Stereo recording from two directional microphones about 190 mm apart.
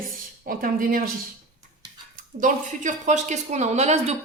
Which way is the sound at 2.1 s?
40° right (ahead or behind).